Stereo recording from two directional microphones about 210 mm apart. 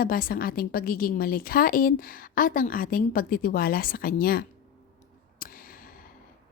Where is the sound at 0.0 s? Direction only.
45° left (ahead or behind).